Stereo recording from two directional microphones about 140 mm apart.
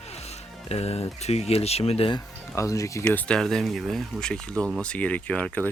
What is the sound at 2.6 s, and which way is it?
Speech, 20° left (ahead or behind).